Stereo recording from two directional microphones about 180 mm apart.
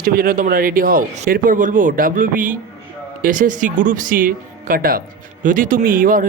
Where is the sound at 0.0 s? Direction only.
50° right (ahead or behind).